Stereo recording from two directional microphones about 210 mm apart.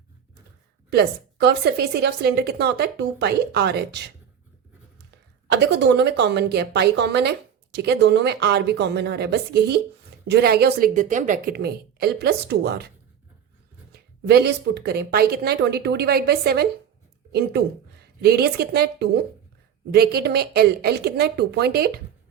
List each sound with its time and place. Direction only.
0.9 s a woman's voice: 50° right (ahead or behind)
5.5 s a woman's voice: 55° right (ahead or behind)
13.9 s a woman's voice: 50° right (ahead or behind)
18.0 s a woman's voice: 50° right (ahead or behind)